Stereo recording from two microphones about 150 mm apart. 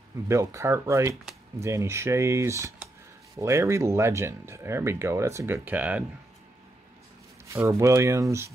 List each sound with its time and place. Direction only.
0.3 s speech: 20° right (ahead or behind)
7.4 s speech: 20° right (ahead or behind)